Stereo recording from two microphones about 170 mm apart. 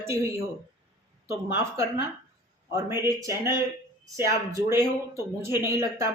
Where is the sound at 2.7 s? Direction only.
15° right (ahead or behind).